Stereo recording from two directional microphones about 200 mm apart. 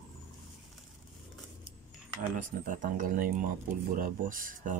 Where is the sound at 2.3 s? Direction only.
40° right (ahead or behind).